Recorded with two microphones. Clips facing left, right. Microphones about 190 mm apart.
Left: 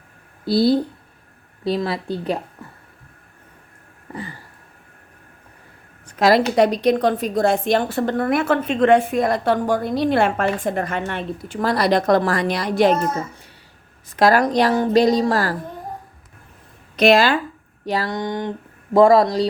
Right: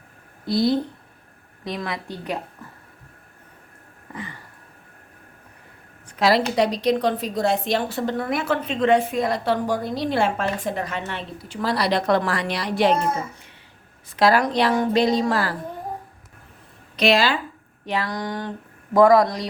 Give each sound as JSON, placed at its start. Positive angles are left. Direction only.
{"t": 0.4, "sound": "a woman's voice", "side_deg": 35}
{"t": 4.1, "sound": "a sound", "side_deg": 35}
{"t": 6.1, "sound": "a sound", "side_deg": 45}
{"t": 6.6, "sound": "a woman's voice", "side_deg": 50}
{"t": 14.2, "sound": "a woman's voice", "side_deg": 45}
{"t": 17.0, "sound": "a woman's voice", "side_deg": 50}
{"t": 17.8, "sound": "a woman's voice", "side_deg": 35}
{"t": 18.1, "sound": "speech", "side_deg": 20}